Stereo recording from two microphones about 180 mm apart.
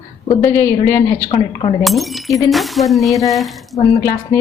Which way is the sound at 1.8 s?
Centre (ahead or behind).